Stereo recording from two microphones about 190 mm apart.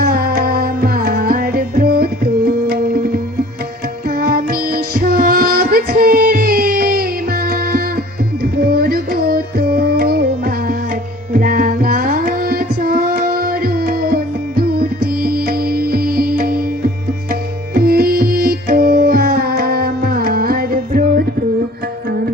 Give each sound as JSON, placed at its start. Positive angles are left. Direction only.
{"t": 0.0, "sound": "music", "side_deg": -50}
{"t": 4.2, "sound": "music", "side_deg": -50}
{"t": 8.6, "sound": "music", "side_deg": -55}